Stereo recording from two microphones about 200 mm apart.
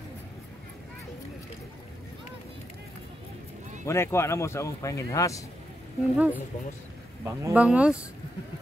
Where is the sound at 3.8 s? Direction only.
15° left (ahead or behind).